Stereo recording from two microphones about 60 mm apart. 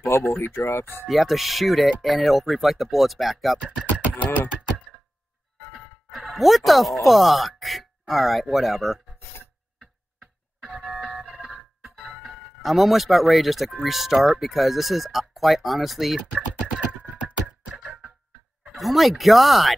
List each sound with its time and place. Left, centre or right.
0.4 s speech: left
1.0 s speech: centre
3.7 s beatboxing: right
6.3 s speech: centre
9.8 s a sound: centre
11.1 s music: centre
12.6 s speech: centre
17.6 s music: centre
18.8 s speech: centre